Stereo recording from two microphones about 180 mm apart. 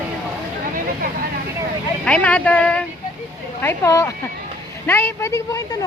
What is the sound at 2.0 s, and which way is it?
Speech, 5° left (ahead or behind).